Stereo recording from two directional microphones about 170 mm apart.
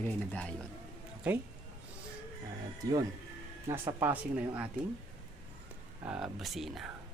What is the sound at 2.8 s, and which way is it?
Speech, 20° right (ahead or behind).